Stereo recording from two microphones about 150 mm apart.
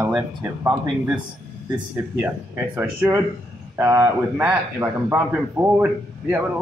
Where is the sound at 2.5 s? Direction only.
15° right (ahead or behind).